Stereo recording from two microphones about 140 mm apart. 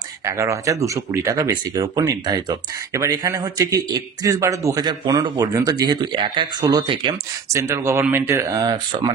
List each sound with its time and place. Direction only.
0.2 s speech: 20° right (ahead or behind)
7.4 s speech: 20° right (ahead or behind)